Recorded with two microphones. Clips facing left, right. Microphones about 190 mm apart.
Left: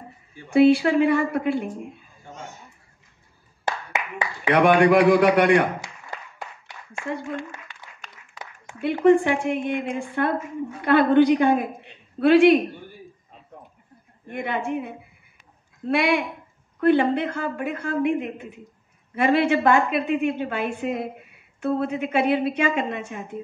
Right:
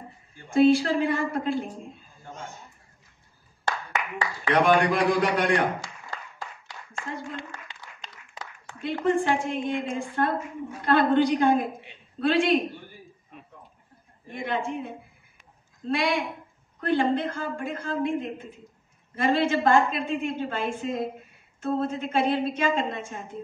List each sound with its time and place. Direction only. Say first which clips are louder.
0.5 s a woman's voice: left 3 dB; 65° left (ahead or behind)
4.6 s a woman's voice: left 5 dB; 65° left (ahead or behind)
8.8 s a woman's voice: left 7 dB; 65° left (ahead or behind)
14.2 s a woman's voice: left 2 dB; 60° left (ahead or behind)